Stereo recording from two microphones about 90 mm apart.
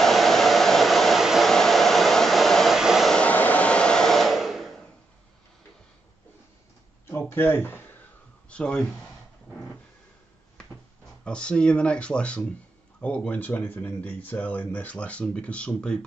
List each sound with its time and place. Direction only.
0.0 s hair dryer: centre (ahead or behind)
3.2 s hair dryer: 15° left (ahead or behind); by 4.7 s centre (ahead or behind)
7.1 s a sound: 25° left (ahead or behind)
8.5 s speech: 10° left (ahead or behind)
11.2 s speech: 10° left (ahead or behind)